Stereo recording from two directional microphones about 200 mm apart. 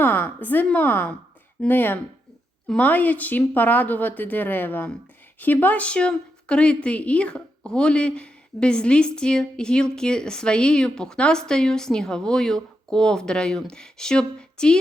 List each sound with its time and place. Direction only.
0.0 s a woman's voice: 10° left (ahead or behind)